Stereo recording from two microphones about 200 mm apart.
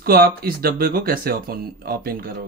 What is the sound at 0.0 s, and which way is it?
Speech, 50° right (ahead or behind).